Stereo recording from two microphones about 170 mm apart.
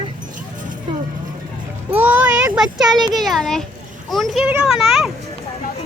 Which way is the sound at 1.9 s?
10° right (ahead or behind).